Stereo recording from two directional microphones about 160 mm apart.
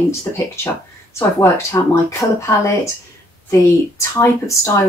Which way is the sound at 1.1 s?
20° left (ahead or behind).